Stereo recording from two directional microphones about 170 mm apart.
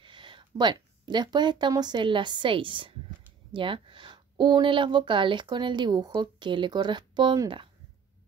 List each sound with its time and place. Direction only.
0.0 s speech: 30° right (ahead or behind)